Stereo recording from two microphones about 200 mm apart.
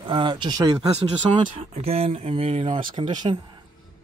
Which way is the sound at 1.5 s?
30° right (ahead or behind).